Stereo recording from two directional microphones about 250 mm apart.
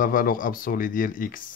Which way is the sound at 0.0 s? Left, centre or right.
Left.